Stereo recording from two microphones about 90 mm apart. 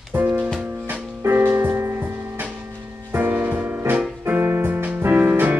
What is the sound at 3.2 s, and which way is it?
Music, 20° right (ahead or behind).